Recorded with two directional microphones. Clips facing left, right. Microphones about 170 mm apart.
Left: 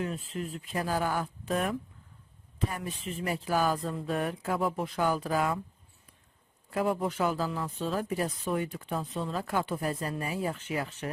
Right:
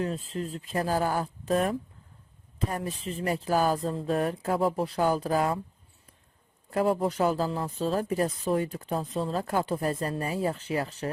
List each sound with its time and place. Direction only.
0.0 s speech: 35° right (ahead or behind)
6.7 s speech: 35° right (ahead or behind)